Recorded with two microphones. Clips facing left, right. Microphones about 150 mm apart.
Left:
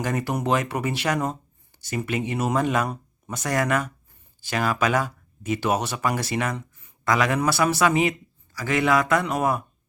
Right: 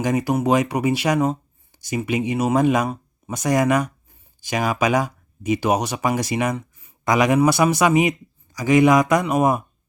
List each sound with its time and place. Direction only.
0.0 s speech: 10° right (ahead or behind)